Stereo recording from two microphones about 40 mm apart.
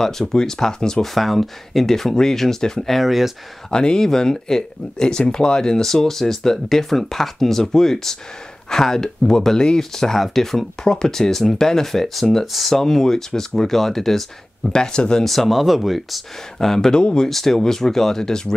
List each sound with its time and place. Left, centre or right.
0.0 s speech: centre
1.0 s speech: centre
3.0 s speech: centre
3.7 s speech: centre
14.7 s speech: centre
15.2 s speech: centre
16.5 s speech: centre
17.3 s speech: centre